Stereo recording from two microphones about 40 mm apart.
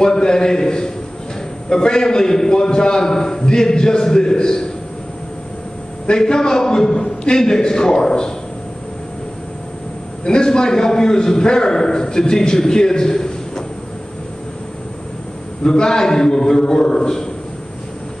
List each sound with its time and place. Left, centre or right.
0.0 s a man's voice: centre
6.0 s a man's voice: centre
10.2 s a man's voice: left
15.6 s a man's voice: centre